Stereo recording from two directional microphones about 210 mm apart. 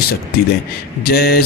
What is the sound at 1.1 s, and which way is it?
Speech, 50° left (ahead or behind).